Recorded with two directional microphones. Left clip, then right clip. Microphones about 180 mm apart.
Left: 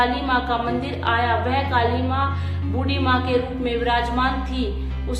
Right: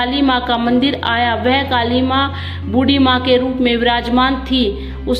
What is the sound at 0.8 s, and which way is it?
A woman's voice, 45° right (ahead or behind).